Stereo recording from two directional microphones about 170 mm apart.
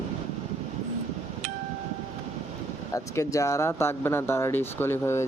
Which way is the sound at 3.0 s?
20° left (ahead or behind).